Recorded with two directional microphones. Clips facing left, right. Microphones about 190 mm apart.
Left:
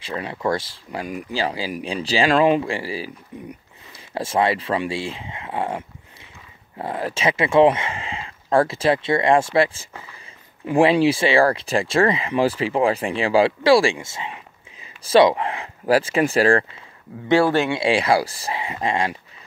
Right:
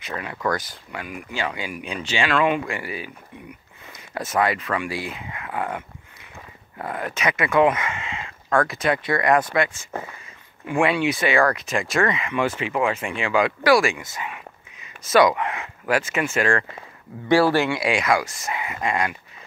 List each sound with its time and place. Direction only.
0.0 s speech: 30° left (ahead or behind)
4.1 s speech: 30° left (ahead or behind)
17.3 s speech: 20° left (ahead or behind)